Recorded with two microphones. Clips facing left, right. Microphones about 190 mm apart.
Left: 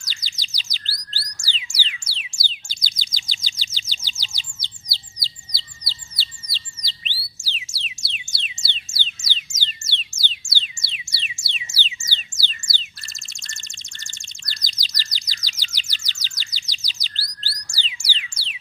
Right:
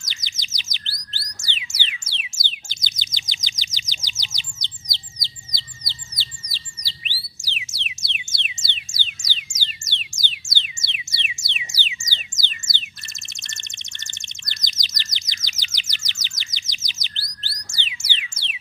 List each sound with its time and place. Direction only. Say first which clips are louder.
0.1 s chirp: left 1 dB; 20° right (ahead or behind)
6.5 s music: left 1 dB; 10° right (ahead or behind)